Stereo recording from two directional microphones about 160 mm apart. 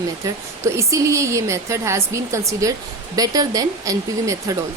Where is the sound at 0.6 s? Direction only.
20° right (ahead or behind).